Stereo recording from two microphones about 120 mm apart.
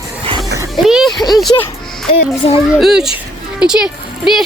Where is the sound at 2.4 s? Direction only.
55° left (ahead or behind).